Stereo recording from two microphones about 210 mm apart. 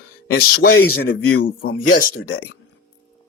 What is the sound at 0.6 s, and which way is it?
Speech, 90° left.